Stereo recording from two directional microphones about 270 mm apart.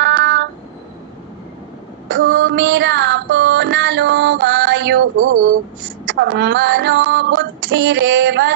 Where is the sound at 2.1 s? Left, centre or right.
Right.